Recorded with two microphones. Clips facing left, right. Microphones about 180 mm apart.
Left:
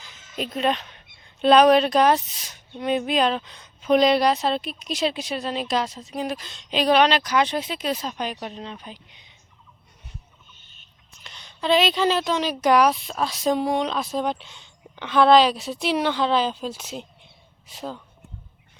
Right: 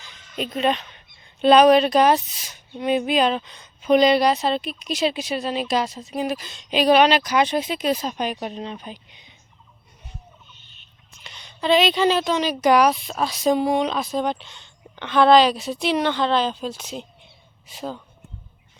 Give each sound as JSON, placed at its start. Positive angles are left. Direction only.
{"t": 0.0, "sound": "a woman's voice", "side_deg": 0}
{"t": 11.2, "sound": "a woman's voice", "side_deg": 0}